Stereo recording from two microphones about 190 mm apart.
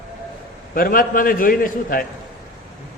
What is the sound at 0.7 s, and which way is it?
A man's voice, 50° left (ahead or behind).